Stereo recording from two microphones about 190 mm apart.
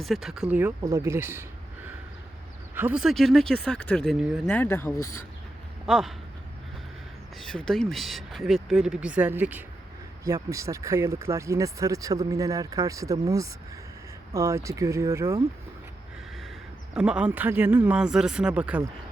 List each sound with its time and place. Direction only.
0.0 s speech: centre (ahead or behind)
0.5 s speech: 10° right (ahead or behind)
4.5 s speech: 10° left (ahead or behind)
5.8 s speech: centre (ahead or behind)
7.3 s speech: 5° left (ahead or behind); by 15.4 s 15° right (ahead or behind)
16.9 s speech: 5° right (ahead or behind)